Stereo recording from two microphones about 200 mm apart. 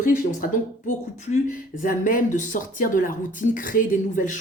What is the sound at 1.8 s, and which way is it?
Speech, 45° left (ahead or behind).